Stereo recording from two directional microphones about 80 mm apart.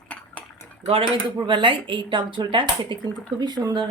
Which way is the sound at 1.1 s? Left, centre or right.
Right.